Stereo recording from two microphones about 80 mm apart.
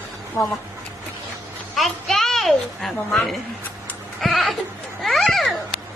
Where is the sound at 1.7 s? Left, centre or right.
Centre.